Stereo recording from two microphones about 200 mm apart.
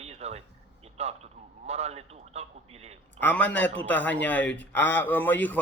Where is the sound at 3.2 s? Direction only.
10° left (ahead or behind).